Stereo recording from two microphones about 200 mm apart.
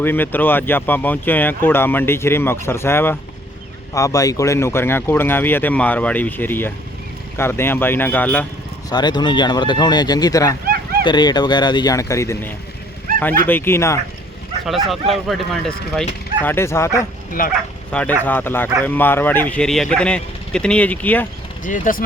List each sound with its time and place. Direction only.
0.0 s speech: 10° left (ahead or behind)
8.9 s speech: 20° left (ahead or behind)
14.8 s speech: centre (ahead or behind)
21.6 s speech: 40° left (ahead or behind)